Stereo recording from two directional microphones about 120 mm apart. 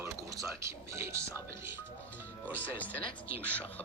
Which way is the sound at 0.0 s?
30° right (ahead or behind).